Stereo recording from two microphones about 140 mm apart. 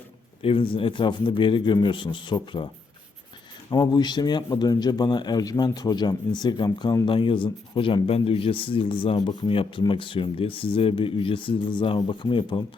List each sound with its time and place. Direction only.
0.4 s a man's voice: 40° left (ahead or behind)
3.7 s a man's voice: 30° left (ahead or behind)